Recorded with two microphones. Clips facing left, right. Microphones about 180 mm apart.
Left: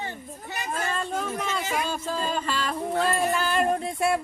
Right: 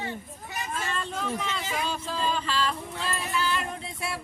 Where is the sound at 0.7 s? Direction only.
45° left (ahead or behind).